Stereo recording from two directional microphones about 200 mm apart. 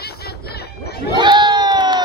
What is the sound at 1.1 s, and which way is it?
Crowd, 20° right (ahead or behind).